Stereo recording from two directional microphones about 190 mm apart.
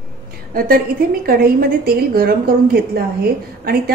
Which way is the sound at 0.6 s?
50° right (ahead or behind).